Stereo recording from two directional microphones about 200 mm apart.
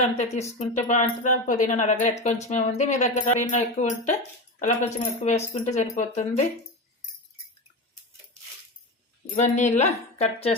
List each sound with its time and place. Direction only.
0.0 s speech: 35° left (ahead or behind)
9.3 s speech: 35° left (ahead or behind)